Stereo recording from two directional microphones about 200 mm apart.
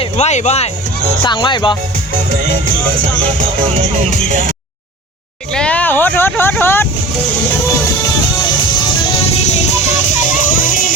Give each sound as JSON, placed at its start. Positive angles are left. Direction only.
{"t": 0.0, "sound": "speech", "side_deg": 35}
{"t": 1.2, "sound": "speech", "side_deg": 25}
{"t": 4.3, "sound": "speech", "side_deg": -40}
{"t": 5.5, "sound": "vehicle", "side_deg": 5}
{"t": 8.7, "sound": "music", "side_deg": 20}
{"t": 10.4, "sound": "music", "side_deg": 40}